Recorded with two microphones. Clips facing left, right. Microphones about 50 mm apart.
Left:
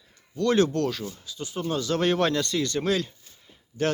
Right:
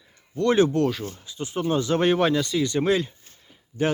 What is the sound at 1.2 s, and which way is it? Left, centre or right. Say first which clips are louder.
Speech: right 4 dB; right.